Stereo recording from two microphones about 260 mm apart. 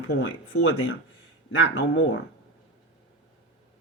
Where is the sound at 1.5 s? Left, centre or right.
Left.